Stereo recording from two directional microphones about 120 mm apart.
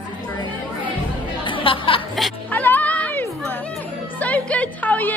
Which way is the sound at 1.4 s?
45° left (ahead or behind).